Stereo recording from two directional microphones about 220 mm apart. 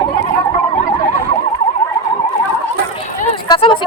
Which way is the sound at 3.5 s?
20° left (ahead or behind).